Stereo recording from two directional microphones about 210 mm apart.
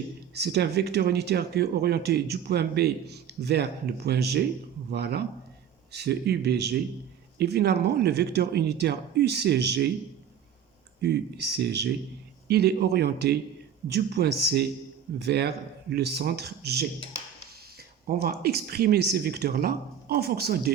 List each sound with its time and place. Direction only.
0.3 s speech: 50° right (ahead or behind)
11.0 s speech: 50° right (ahead or behind)